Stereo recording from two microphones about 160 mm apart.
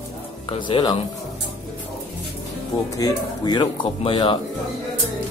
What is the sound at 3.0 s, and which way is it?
Speech, 25° left (ahead or behind).